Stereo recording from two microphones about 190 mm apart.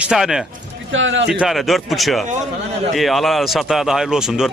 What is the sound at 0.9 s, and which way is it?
Speech, 85° right.